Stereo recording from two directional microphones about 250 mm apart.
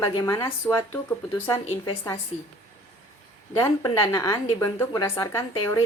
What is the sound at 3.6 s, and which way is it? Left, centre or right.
A woman's voice, centre.